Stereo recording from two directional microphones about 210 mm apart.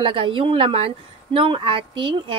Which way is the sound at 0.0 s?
25° right (ahead or behind).